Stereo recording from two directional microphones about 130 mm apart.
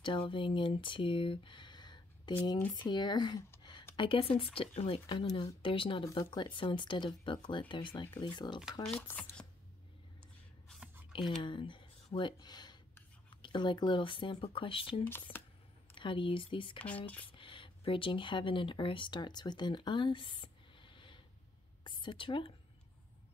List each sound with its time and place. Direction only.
0.0 s speech: 40° left (ahead or behind)
9.0 s speech: 10° left (ahead or behind)
11.4 s speech: 40° left (ahead or behind)
16.7 s a sound: 10° left (ahead or behind)
17.3 s speech: 40° left (ahead or behind)